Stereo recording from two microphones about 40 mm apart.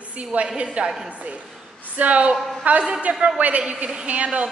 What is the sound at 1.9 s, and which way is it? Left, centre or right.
A woman's voice, right.